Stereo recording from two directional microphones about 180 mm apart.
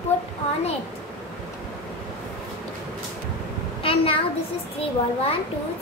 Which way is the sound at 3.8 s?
30° left (ahead or behind).